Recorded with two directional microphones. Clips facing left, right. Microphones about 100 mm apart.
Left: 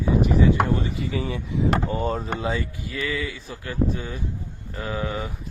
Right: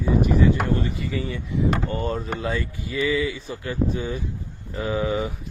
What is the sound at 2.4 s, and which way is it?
Speech, 10° left (ahead or behind).